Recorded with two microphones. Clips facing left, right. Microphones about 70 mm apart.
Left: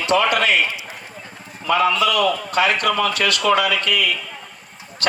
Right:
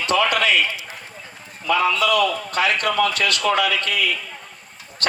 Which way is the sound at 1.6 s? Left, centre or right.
Left.